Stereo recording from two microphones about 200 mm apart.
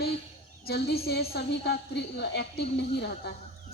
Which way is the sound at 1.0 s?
50° left (ahead or behind).